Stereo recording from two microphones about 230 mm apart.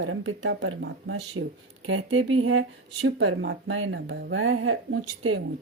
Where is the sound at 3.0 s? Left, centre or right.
Right.